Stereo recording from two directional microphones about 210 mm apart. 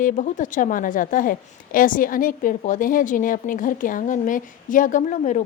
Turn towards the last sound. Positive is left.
turn(degrees=35)  # may be behind; listen again after turning